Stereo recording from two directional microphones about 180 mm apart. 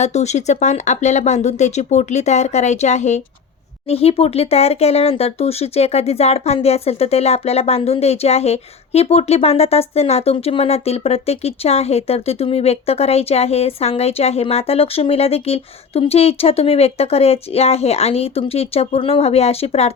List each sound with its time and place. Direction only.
0.0 s speech: 40° left (ahead or behind)